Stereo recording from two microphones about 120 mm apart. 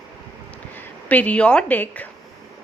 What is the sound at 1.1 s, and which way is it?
Speech, 10° left (ahead or behind).